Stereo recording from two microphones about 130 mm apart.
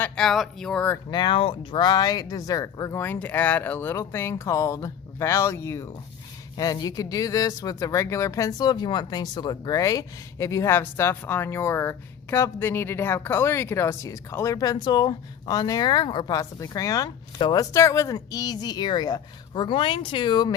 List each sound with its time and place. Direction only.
0.2 s speech: 5° left (ahead or behind)
1.1 s speech: 40° left (ahead or behind)